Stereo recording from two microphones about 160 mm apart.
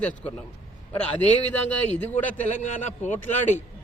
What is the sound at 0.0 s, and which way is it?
Speech, 10° left (ahead or behind).